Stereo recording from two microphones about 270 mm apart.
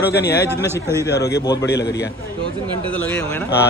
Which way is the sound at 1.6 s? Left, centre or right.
Left.